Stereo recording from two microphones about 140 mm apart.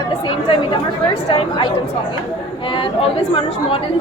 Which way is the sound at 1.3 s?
35° left (ahead or behind).